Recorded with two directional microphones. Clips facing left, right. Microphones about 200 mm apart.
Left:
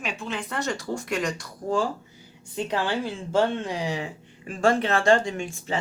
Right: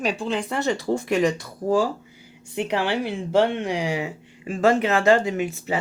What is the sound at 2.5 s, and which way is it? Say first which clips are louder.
A woman's voice: right 3 dB; 15° right (ahead or behind).